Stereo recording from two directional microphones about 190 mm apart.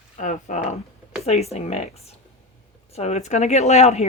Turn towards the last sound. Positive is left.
turn(degrees=35)  # may be behind; listen again after turning